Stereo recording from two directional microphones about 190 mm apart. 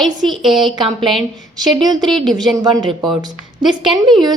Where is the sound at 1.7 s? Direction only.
20° right (ahead or behind).